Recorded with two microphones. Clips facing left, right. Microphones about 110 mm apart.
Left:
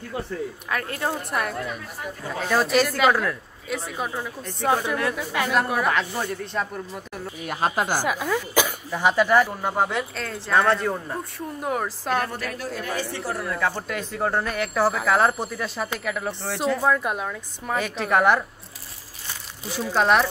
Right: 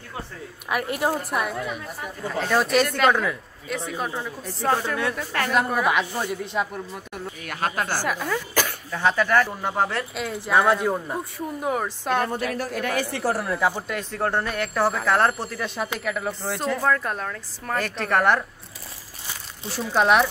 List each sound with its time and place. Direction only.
0.7 s speech: 15° right (ahead or behind)
1.3 s speech: centre (ahead or behind)
7.4 s a woman's voice: 20° left (ahead or behind)
8.1 s speech: 5° left (ahead or behind)
12.8 s speech: 70° right (ahead or behind)
13.6 s speech: 15° right (ahead or behind)
13.8 s speech: centre (ahead or behind)
16.8 s a woman's voice: 10° left (ahead or behind)
19.7 s speech: centre (ahead or behind)